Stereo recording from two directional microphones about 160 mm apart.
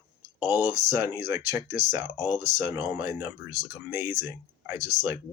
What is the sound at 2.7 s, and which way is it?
Speech, 10° right (ahead or behind).